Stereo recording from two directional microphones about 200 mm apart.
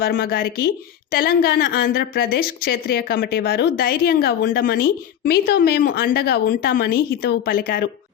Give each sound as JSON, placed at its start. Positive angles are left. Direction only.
{"t": 0.0, "sound": "a woman's voice", "side_deg": 50}